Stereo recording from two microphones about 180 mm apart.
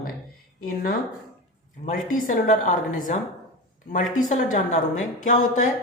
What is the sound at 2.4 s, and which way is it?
Speech, 45° left (ahead or behind).